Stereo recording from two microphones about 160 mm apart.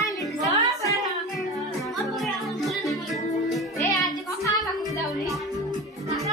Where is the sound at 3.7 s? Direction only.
20° left (ahead or behind).